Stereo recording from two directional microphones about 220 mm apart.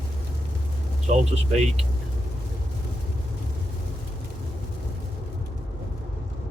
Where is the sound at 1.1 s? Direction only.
30° right (ahead or behind).